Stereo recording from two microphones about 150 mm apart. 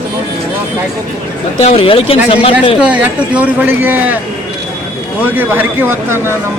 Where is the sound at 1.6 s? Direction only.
40° left (ahead or behind).